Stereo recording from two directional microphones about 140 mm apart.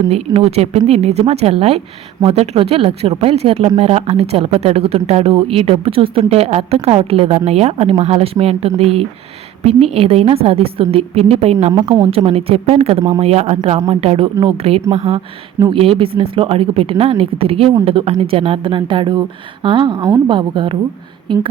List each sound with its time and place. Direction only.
0.1 s speech: 45° right (ahead or behind)